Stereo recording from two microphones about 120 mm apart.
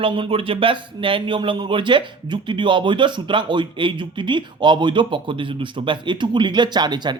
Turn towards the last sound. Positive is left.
turn(degrees=-35)  # may be behind; listen again after turning